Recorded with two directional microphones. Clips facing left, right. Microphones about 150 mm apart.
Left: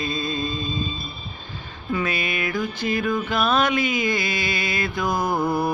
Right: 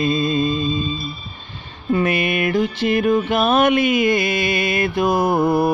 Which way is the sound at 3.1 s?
25° right (ahead or behind).